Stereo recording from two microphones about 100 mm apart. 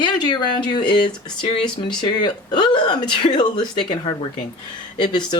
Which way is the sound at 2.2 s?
50° left (ahead or behind).